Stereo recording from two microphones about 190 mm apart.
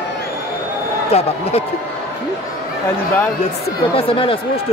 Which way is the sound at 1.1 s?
35° left (ahead or behind).